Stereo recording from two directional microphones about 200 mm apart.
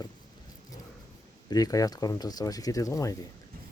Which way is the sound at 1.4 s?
20° left (ahead or behind).